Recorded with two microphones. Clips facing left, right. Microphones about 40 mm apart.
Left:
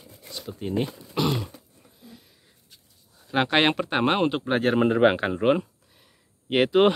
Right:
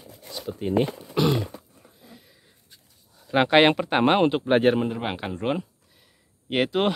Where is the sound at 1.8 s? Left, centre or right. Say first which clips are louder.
Even; centre.